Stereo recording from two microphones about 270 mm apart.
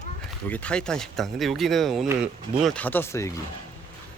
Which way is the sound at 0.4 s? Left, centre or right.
Centre.